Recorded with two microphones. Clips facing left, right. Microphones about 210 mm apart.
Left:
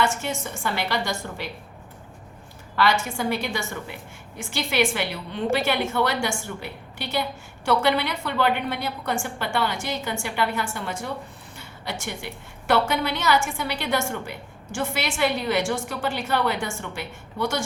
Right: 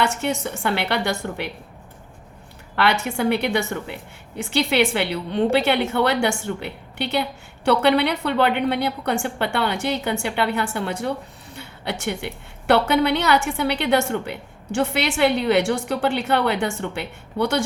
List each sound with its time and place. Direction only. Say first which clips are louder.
0.0 s a woman's voice: right 3 dB; 65° right (ahead or behind)
2.7 s a woman's voice: right 2 dB; 65° right (ahead or behind)